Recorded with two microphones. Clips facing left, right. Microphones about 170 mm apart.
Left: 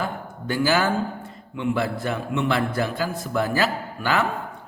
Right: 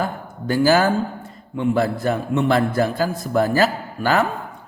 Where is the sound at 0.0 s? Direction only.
40° right (ahead or behind).